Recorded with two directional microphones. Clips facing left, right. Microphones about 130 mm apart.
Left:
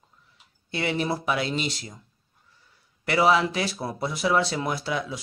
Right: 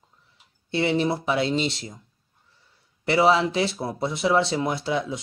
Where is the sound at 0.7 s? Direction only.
25° right (ahead or behind).